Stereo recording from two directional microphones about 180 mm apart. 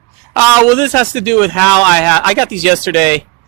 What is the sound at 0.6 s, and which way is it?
Speech, 10° left (ahead or behind).